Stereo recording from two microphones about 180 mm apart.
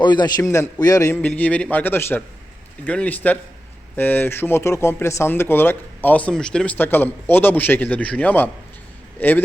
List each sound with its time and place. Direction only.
0.0 s speech: 25° left (ahead or behind)